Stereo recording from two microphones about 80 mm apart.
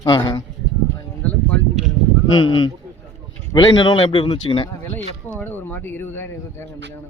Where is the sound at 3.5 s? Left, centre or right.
Left.